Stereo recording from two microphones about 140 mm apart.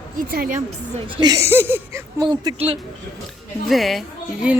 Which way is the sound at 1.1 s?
30° right (ahead or behind).